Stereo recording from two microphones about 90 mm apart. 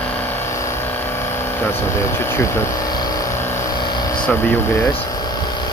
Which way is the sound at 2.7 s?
50° left (ahead or behind).